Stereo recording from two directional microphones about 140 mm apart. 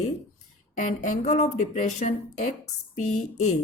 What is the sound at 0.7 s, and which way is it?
A woman's voice, 65° left (ahead or behind).